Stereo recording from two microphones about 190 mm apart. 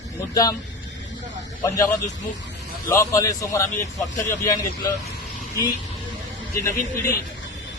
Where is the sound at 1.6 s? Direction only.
15° left (ahead or behind).